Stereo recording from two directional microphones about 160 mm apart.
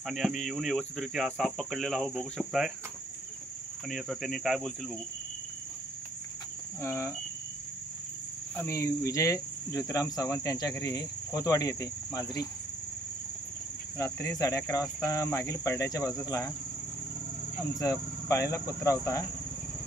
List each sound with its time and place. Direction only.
0.0 s speech: centre (ahead or behind)
3.9 s speech: centre (ahead or behind)
6.8 s cricket: 20° left (ahead or behind)
8.5 s speech: 20° left (ahead or behind)
13.9 s speech: 20° left (ahead or behind)
17.7 s speech: 20° left (ahead or behind)